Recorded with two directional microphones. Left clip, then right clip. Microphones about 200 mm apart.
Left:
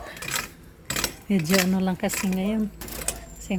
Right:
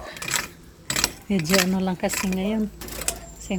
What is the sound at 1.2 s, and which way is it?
Speech, 10° left (ahead or behind).